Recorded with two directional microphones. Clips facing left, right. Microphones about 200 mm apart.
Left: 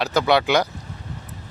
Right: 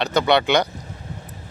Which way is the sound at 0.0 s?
5° left (ahead or behind).